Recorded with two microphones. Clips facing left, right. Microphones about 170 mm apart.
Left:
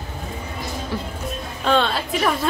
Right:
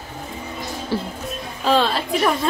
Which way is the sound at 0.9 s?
30° right (ahead or behind).